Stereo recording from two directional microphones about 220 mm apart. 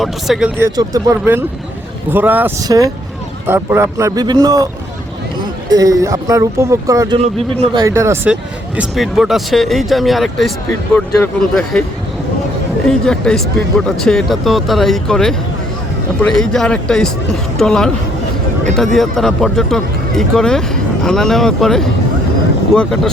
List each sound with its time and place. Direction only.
0.0 s speech: centre (ahead or behind)
12.9 s speech: 5° left (ahead or behind)
18.9 s speech: centre (ahead or behind)